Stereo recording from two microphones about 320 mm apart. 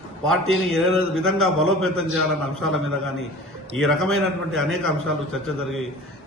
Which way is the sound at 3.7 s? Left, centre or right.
Centre.